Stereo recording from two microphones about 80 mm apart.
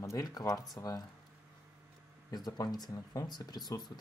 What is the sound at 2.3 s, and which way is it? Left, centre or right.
Speech, left.